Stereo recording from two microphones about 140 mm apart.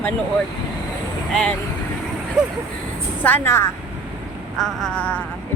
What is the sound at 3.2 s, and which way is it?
Speech, 15° left (ahead or behind).